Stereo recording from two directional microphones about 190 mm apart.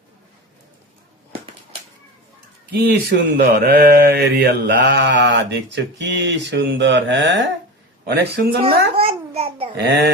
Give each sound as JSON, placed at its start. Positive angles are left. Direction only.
{"t": 2.7, "sound": "speech", "side_deg": -50}
{"t": 8.0, "sound": "speech", "side_deg": -60}
{"t": 9.0, "sound": "babbling", "side_deg": -30}
{"t": 9.7, "sound": "speech", "side_deg": -65}